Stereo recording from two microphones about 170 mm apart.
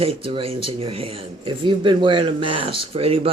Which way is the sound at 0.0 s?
35° right (ahead or behind).